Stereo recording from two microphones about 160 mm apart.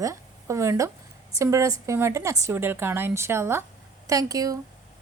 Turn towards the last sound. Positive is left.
turn(degrees=-20)  # may be behind; listen again after turning